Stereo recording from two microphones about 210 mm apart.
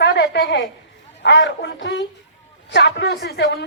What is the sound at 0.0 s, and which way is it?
A woman's voice, 55° left (ahead or behind).